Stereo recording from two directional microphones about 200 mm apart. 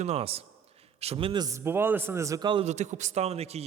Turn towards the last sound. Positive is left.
turn(degrees=-30)  # may be behind; listen again after turning